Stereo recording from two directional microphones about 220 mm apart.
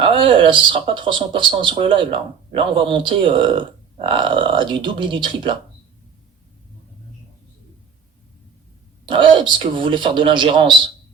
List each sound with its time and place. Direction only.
0.0 s speech: 25° right (ahead or behind)
9.0 s speech: 20° right (ahead or behind)